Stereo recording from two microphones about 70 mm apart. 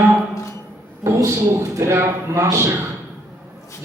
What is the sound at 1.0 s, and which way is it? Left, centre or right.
A man's voice, right.